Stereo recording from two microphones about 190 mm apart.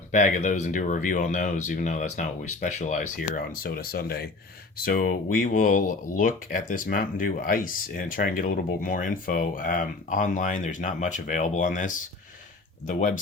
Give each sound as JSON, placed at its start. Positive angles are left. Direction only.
{"t": 0.1, "sound": "speech", "side_deg": 40}